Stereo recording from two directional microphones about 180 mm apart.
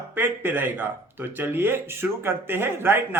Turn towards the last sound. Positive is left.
turn(degrees=-10)  # may be behind; listen again after turning